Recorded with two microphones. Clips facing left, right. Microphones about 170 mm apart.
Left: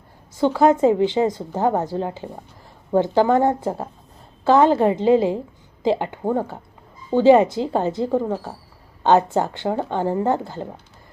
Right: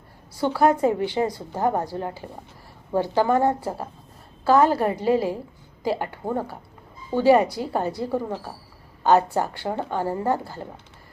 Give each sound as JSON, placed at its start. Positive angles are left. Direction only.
{"t": 0.3, "sound": "a woman's voice", "side_deg": 20}